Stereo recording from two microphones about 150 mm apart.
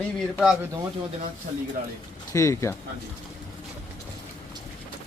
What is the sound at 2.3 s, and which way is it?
Speech, 20° left (ahead or behind).